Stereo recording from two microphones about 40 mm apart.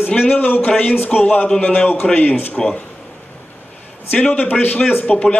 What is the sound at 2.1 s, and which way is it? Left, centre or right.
Speech, left.